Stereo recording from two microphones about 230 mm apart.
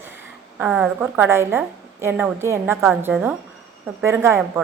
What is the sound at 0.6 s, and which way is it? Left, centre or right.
A woman's voice, centre.